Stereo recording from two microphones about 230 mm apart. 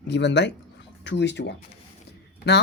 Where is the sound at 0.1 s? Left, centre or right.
Left.